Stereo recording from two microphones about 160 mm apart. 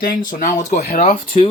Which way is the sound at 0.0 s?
60° left (ahead or behind).